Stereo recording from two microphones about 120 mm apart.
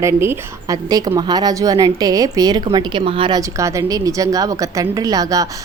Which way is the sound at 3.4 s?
25° right (ahead or behind).